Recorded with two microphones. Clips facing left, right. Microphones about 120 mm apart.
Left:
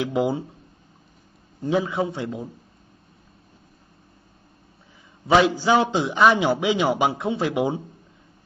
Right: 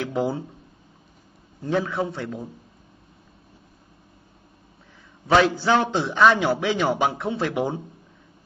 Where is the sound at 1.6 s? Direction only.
15° left (ahead or behind).